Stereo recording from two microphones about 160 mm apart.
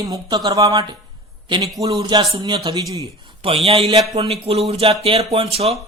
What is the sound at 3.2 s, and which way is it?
Speech, 35° right (ahead or behind).